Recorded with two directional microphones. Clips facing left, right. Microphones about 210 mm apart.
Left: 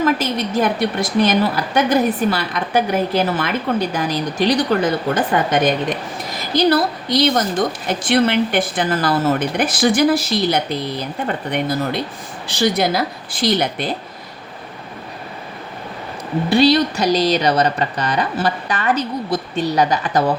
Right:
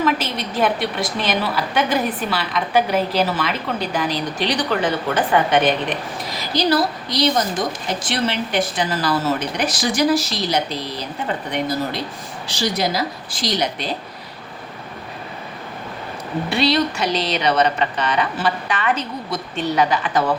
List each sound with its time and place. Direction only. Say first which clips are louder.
0.0 s a woman's voice: left 3 dB; 45° left (ahead or behind)
12.5 s speech: left 4 dB; 55° left (ahead or behind)
16.5 s speech: left 5 dB; 35° left (ahead or behind)